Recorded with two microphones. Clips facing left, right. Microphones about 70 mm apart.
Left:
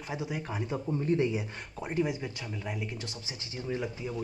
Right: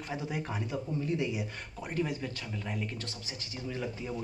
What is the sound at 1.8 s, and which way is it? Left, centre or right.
Speech, centre.